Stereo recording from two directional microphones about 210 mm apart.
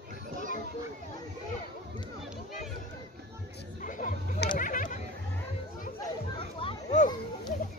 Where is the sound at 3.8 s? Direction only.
40° left (ahead or behind).